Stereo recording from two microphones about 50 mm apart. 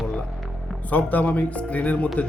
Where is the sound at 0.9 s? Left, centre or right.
Left.